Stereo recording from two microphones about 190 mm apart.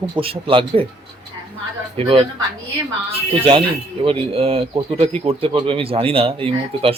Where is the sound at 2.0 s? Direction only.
30° right (ahead or behind).